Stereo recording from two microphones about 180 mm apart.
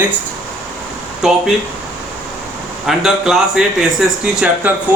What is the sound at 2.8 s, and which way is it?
Speech, centre (ahead or behind).